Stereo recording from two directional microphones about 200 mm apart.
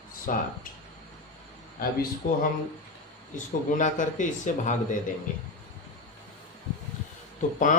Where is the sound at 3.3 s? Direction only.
40° left (ahead or behind).